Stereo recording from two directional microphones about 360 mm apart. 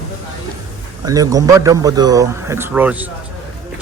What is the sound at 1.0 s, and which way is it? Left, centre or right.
Speech, centre.